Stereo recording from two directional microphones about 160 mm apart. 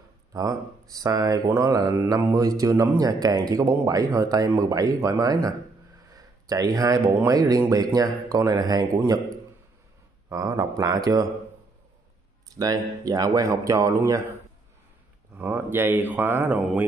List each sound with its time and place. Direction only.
0.3 s speech: 20° right (ahead or behind)
12.5 s speech: 20° right (ahead or behind)
15.3 s speech: 10° right (ahead or behind)